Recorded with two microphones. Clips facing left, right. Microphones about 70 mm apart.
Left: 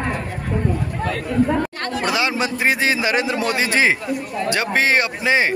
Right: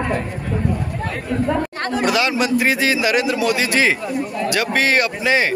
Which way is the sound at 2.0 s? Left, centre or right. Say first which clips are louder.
Right 2 dB; left.